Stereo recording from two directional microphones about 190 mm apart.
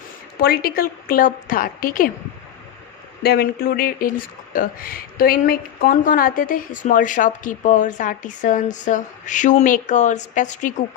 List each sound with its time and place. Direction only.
0.3 s a woman's voice: 55° left (ahead or behind)
3.2 s a woman's voice: 55° left (ahead or behind)